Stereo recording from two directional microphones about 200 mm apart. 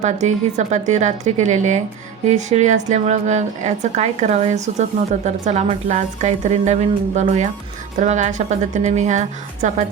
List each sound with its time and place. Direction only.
0.0 s a woman's voice: 35° right (ahead or behind)